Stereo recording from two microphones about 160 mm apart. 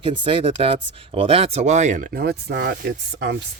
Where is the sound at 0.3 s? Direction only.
35° right (ahead or behind); by 2.3 s 70° right (ahead or behind).